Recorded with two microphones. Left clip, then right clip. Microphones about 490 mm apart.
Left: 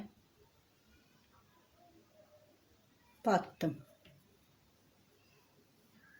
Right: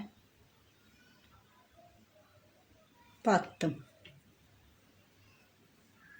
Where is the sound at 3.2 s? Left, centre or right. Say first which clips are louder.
Right 3 dB; left.